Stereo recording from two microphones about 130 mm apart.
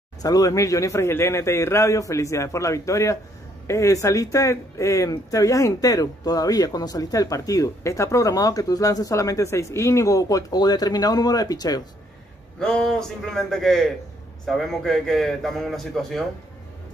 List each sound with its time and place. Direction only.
0.2 s speech: 30° left (ahead or behind)
12.5 s a man's voice: 5° left (ahead or behind)